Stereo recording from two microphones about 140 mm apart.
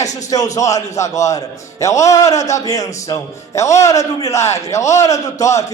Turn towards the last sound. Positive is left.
turn(degrees=25)  # may be behind; listen again after turning